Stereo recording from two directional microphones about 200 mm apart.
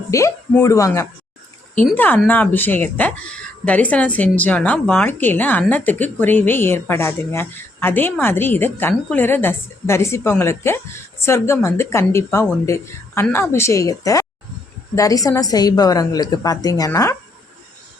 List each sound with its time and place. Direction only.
0.1 s a woman's voice: 15° left (ahead or behind)